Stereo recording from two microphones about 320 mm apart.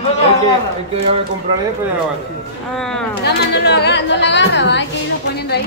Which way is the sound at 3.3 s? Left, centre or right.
Left.